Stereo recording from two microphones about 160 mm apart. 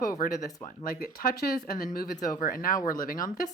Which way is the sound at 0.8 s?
65° left (ahead or behind).